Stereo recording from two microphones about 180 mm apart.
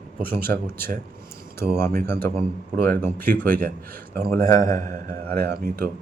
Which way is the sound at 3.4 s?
50° right (ahead or behind).